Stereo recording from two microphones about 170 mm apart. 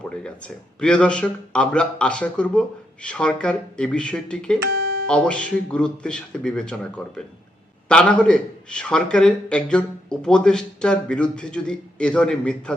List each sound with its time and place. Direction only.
0.0 s a man's voice: 5° left (ahead or behind)
4.7 s music: 65° right (ahead or behind)
5.0 s a man's voice: 5° left (ahead or behind)